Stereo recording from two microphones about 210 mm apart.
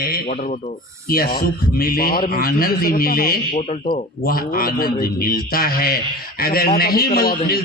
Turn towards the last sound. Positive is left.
turn(degrees=45)  # may be behind; listen again after turning